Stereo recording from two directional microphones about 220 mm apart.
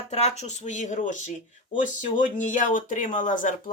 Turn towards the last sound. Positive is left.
turn(degrees=35)  # may be behind; listen again after turning